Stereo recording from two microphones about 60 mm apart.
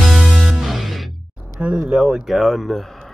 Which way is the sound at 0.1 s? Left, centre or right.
Centre.